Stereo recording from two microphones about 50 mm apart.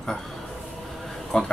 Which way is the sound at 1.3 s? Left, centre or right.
Centre.